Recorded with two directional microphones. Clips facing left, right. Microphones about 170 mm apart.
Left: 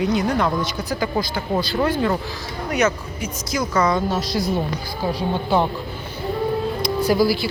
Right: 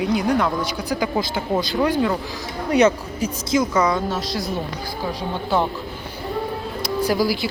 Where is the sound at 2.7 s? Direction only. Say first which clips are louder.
Right 4 dB; 30° right (ahead or behind).